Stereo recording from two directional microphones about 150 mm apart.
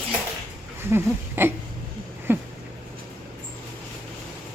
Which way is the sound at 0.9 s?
15° right (ahead or behind).